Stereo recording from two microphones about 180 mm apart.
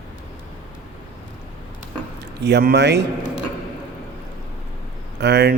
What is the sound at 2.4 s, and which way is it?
Speech, 65° right (ahead or behind).